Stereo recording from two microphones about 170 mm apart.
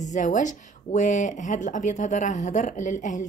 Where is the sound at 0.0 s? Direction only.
45° left (ahead or behind).